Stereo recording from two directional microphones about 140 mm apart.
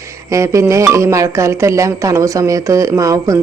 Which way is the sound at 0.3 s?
20° right (ahead or behind).